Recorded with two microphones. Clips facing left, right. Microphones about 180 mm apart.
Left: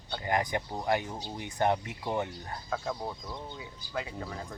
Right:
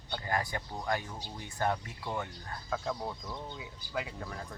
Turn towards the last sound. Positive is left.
turn(degrees=5)  # may be behind; listen again after turning